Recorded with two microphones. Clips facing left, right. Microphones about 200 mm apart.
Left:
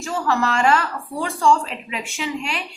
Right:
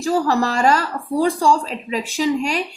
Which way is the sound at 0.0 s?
35° right (ahead or behind).